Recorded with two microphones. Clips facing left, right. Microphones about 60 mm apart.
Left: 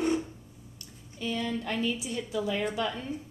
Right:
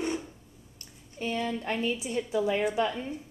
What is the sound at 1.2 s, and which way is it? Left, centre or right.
A woman's voice, right.